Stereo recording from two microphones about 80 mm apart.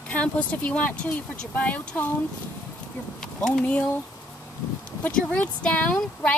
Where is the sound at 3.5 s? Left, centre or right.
Centre.